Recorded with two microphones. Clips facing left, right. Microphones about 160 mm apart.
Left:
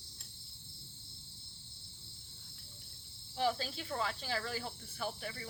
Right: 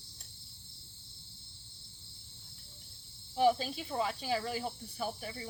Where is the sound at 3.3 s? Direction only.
15° right (ahead or behind).